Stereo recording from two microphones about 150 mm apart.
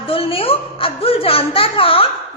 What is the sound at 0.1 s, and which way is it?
A woman's voice, 40° left (ahead or behind).